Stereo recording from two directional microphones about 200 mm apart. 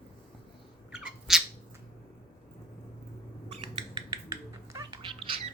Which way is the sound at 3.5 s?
25° right (ahead or behind).